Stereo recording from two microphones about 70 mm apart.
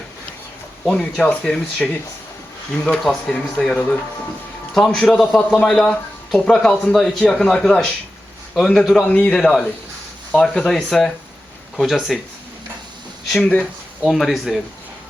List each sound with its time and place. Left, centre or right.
0.9 s a man's voice: centre
5.1 s a man's voice: centre
5.5 s a man's voice: centre
13.3 s a man's voice: centre
14.0 s speech: centre